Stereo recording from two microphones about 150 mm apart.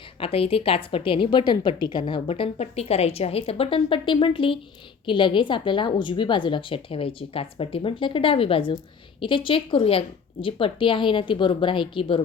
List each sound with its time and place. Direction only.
0.2 s a woman's voice: 40° left (ahead or behind)